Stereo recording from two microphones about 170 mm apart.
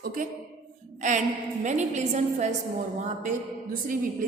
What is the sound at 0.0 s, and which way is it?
A woman's voice, 55° right (ahead or behind).